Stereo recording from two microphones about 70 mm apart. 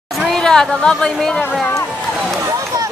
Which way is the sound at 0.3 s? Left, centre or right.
Centre.